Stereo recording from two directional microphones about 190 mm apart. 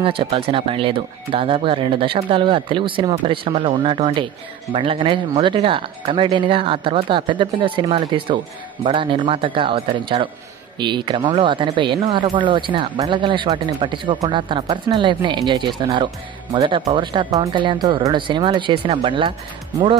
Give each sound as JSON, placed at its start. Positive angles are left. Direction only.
{"t": 0.0, "sound": "speech", "side_deg": -30}